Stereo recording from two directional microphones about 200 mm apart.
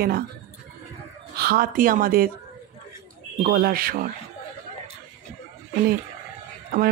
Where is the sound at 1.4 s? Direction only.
50° right (ahead or behind).